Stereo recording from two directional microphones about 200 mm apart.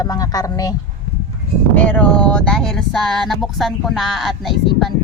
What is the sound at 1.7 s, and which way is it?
Speech, 10° left (ahead or behind).